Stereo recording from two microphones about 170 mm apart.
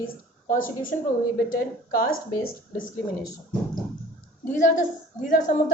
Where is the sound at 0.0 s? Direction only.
55° left (ahead or behind).